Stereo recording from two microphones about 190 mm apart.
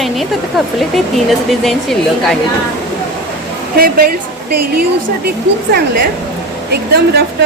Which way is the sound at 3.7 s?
50° right (ahead or behind).